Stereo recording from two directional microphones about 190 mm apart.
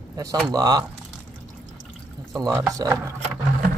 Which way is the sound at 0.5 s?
20° right (ahead or behind).